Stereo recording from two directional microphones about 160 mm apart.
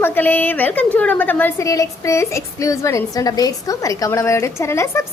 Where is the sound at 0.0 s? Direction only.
10° left (ahead or behind).